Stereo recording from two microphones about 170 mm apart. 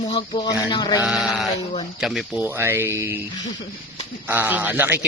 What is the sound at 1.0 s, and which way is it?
Speech, 5° right (ahead or behind).